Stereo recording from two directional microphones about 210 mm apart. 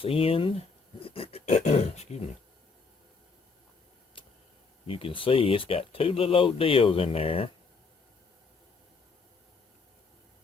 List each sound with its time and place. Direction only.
0.0 s speech: 25° left (ahead or behind)
0.9 s dog: 25° left (ahead or behind)
4.9 s speech: 25° left (ahead or behind)